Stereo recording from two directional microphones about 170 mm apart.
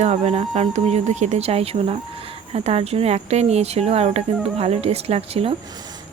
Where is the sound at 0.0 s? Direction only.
40° right (ahead or behind).